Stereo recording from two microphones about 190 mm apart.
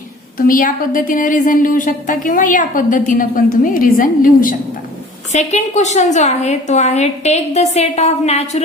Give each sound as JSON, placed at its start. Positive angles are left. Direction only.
{"t": 0.3, "sound": "a woman's voice", "side_deg": 45}
{"t": 5.3, "sound": "a woman's voice", "side_deg": 35}